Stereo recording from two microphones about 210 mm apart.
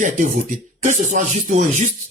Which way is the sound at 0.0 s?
40° right (ahead or behind).